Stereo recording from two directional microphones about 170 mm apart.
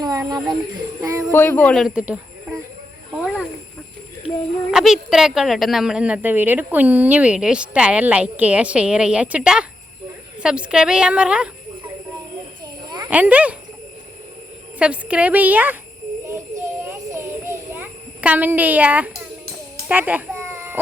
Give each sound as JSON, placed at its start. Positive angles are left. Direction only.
{"t": 0.0, "sound": "speech", "side_deg": -20}
{"t": 1.3, "sound": "speech", "side_deg": 15}
{"t": 4.7, "sound": "a woman's voice", "side_deg": 0}
{"t": 12.8, "sound": "a sound", "side_deg": -25}
{"t": 13.1, "sound": "a woman's voice", "side_deg": -10}
{"t": 14.8, "sound": "a woman's voice", "side_deg": -5}
{"t": 16.2, "sound": "a sound", "side_deg": -15}